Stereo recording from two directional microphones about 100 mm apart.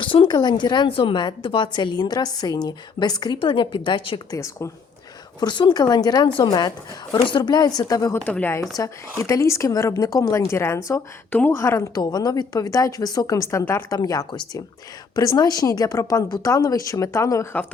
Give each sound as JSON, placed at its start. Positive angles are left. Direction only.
{"t": 0.0, "sound": "a woman's voice", "side_deg": 55}
{"t": 0.9, "sound": "a woman's voice", "side_deg": 60}
{"t": 3.3, "sound": "a woman's voice", "side_deg": 55}
{"t": 4.3, "sound": "a woman's voice", "side_deg": 30}
{"t": 5.4, "sound": "a woman's voice", "side_deg": 50}
{"t": 8.1, "sound": "speech", "side_deg": 15}
{"t": 8.7, "sound": "a woman's voice", "side_deg": 35}
{"t": 11.3, "sound": "speech", "side_deg": 20}
{"t": 11.9, "sound": "a woman's voice", "side_deg": 40}
{"t": 14.3, "sound": "a woman's voice", "side_deg": 50}